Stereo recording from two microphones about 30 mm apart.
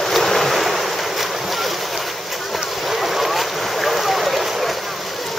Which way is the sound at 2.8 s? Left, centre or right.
Centre.